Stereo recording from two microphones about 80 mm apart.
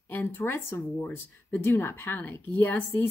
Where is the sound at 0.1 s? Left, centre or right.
Left.